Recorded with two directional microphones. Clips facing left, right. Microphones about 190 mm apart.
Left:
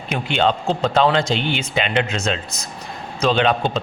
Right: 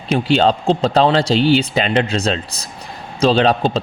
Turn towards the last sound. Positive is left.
turn(degrees=-35)  # may be behind; listen again after turning